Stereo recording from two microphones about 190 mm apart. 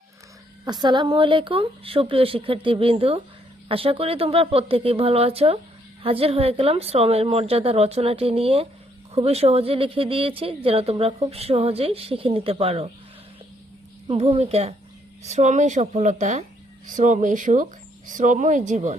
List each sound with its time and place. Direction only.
0.6 s speech: 20° right (ahead or behind)
14.1 s speech: 30° right (ahead or behind)